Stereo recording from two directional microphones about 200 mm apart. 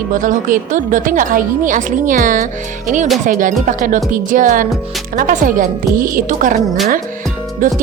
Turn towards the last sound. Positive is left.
turn(degrees=-40)  # may be behind; listen again after turning